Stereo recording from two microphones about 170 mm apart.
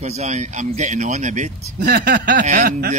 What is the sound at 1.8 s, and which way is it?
Speech, 70° right (ahead or behind).